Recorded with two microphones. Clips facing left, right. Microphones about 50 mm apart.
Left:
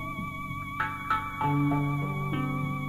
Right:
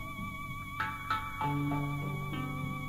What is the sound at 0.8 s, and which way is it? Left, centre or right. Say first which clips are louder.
Music: left 5 dB; centre.